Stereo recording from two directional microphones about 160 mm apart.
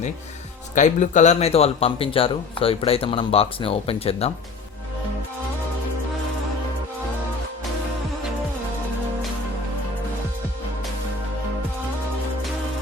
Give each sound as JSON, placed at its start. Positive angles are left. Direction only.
{"t": 0.8, "sound": "speech", "side_deg": 50}